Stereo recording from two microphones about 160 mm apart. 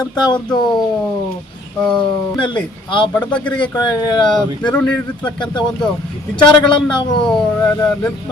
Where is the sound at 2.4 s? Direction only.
30° left (ahead or behind).